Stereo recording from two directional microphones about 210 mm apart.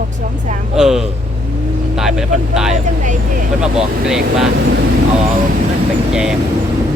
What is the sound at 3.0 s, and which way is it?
Speech, 35° right (ahead or behind).